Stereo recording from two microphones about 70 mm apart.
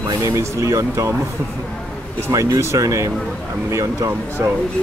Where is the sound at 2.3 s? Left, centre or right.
Right.